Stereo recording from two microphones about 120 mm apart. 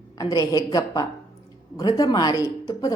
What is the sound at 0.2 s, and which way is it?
Speech, 35° left (ahead or behind).